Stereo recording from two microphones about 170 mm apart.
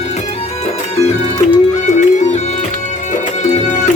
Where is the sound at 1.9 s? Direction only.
45° left (ahead or behind).